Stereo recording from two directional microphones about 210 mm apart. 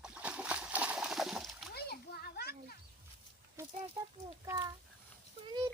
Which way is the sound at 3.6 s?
10° right (ahead or behind).